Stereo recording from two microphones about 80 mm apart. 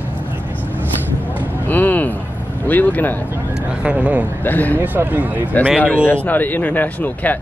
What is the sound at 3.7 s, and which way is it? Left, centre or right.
Speech, centre.